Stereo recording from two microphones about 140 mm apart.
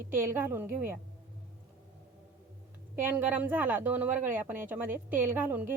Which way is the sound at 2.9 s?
15° right (ahead or behind).